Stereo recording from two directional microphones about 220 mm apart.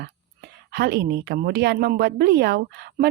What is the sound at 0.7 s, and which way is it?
A woman's voice, 45° right (ahead or behind).